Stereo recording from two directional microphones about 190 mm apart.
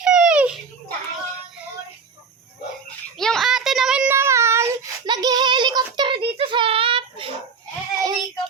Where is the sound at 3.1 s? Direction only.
Centre (ahead or behind); by 7.3 s 30° right (ahead or behind).